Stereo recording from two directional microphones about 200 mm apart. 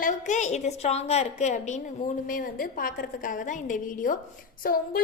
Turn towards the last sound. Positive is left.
turn(degrees=45)  # may be behind; listen again after turning